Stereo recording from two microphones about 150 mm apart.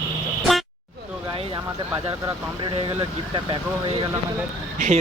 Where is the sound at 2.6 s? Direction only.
35° right (ahead or behind).